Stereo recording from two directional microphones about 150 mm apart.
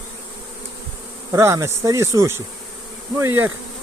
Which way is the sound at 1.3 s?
20° right (ahead or behind).